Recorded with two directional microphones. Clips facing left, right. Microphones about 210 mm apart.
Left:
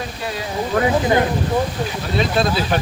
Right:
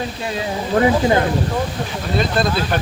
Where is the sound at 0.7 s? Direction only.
25° right (ahead or behind).